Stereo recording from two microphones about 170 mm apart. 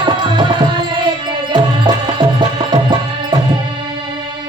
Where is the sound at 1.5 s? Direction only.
25° right (ahead or behind).